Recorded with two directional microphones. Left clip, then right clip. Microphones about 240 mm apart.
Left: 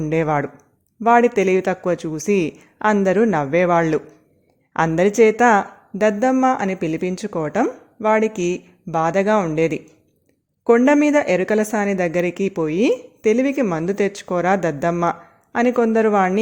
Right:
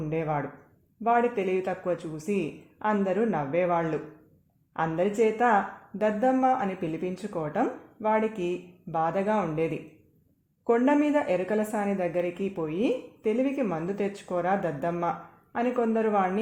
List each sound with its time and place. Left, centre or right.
0.1 s a woman's voice: left